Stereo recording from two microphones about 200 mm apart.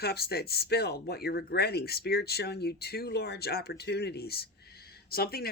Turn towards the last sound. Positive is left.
turn(degrees=50)  # may be behind; listen again after turning